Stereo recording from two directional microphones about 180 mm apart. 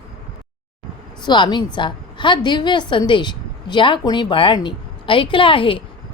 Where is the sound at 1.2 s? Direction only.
25° left (ahead or behind).